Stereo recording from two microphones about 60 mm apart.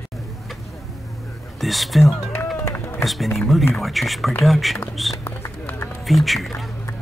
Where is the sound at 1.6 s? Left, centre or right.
Centre.